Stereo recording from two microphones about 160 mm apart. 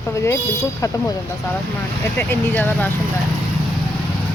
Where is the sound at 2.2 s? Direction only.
10° left (ahead or behind).